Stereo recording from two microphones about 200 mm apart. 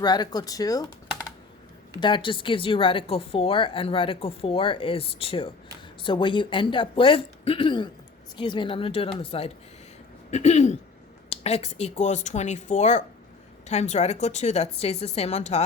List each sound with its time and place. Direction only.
0.0 s a woman's voice: 20° left (ahead or behind)
2.0 s a woman's voice: 25° left (ahead or behind)